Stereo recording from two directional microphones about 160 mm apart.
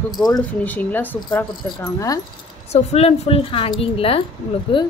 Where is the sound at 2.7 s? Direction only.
40° left (ahead or behind).